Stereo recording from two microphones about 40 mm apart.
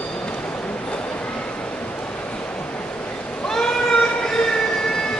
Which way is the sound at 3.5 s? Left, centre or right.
Centre.